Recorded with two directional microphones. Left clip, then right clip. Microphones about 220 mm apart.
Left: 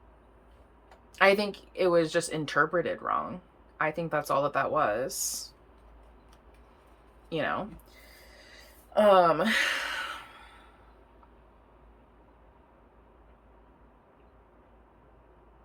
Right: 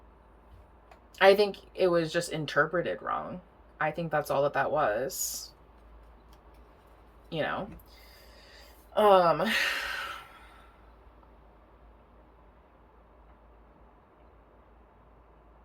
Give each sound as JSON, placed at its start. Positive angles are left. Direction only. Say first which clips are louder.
{"t": 1.1, "sound": "speech", "louder": "right 2 dB", "side_deg": 20}
{"t": 7.3, "sound": "speech", "louder": "left 1 dB", "side_deg": 20}
{"t": 8.5, "sound": "a sound", "louder": "left 2 dB", "side_deg": 20}